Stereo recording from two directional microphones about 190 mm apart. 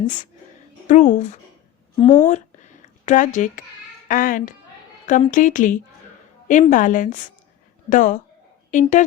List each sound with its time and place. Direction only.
0.9 s a woman's voice: 40° left (ahead or behind)
2.2 s a sound: 40° left (ahead or behind)
4.1 s a woman's voice: 45° left (ahead or behind)